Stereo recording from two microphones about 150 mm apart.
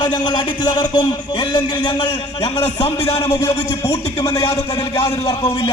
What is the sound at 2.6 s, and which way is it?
A man's voice, 45° left (ahead or behind).